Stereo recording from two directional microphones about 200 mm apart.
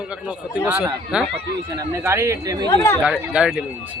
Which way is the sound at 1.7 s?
15° right (ahead or behind).